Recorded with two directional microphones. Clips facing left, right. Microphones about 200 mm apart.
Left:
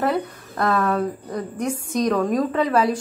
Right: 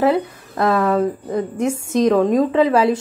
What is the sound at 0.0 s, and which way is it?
A woman's voice, 25° right (ahead or behind).